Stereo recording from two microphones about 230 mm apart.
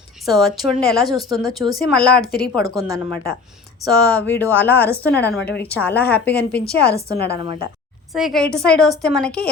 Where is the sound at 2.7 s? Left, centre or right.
Centre.